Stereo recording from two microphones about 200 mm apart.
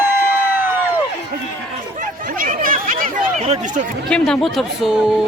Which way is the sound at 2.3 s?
45° right (ahead or behind).